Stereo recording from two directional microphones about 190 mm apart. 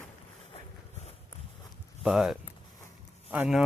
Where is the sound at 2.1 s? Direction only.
5° right (ahead or behind).